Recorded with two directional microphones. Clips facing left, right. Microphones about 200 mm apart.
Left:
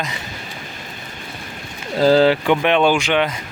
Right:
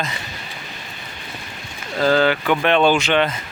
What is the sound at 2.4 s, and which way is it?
Speech, 15° left (ahead or behind).